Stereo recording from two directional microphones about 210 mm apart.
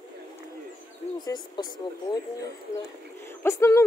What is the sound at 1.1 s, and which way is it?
Speech, 20° left (ahead or behind).